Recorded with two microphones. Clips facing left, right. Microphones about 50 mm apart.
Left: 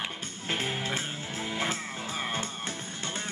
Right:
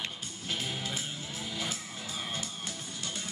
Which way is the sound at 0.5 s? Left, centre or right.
Left.